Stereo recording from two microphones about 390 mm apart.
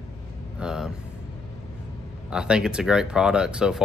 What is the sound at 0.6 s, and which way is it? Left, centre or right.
Vehicle, centre.